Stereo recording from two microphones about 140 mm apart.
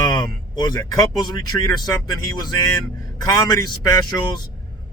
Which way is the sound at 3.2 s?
25° left (ahead or behind).